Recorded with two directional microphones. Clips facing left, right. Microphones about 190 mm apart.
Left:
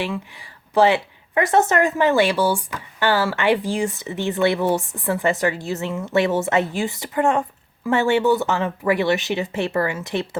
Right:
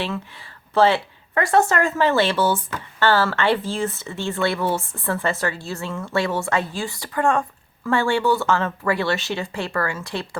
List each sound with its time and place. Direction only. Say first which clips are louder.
0.0 s a woman's voice: left 1 dB; 15° left (ahead or behind)